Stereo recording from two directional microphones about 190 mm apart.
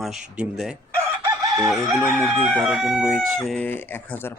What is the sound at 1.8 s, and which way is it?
Speech, 10° right (ahead or behind).